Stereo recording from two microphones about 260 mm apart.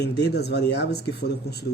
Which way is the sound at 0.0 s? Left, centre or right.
Left.